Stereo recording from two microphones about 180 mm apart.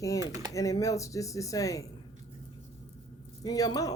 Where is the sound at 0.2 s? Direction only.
20° right (ahead or behind).